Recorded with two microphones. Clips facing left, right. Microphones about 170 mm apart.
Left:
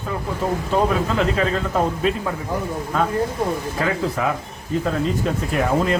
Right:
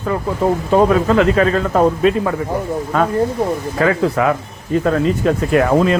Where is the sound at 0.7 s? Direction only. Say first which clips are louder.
Right 8 dB; 75° right (ahead or behind).